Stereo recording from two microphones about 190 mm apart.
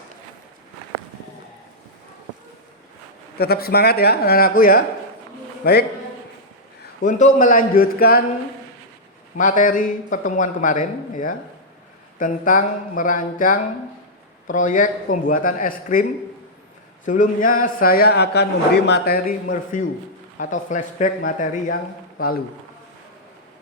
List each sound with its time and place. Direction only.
3.3 s speech: 55° left (ahead or behind)
7.0 s a man's voice: 40° left (ahead or behind)
9.4 s a man's voice: 45° left (ahead or behind)
17.1 s a man's voice: 45° left (ahead or behind)